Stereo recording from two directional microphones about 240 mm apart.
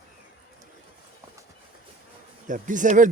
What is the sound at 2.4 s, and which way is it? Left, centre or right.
Speech, right.